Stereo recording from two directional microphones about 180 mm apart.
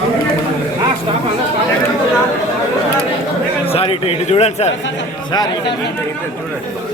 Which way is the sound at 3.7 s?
35° left (ahead or behind).